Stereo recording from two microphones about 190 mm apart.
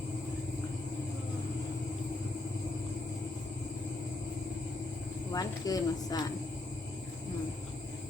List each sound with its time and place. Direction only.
5.3 s speech: 20° left (ahead or behind)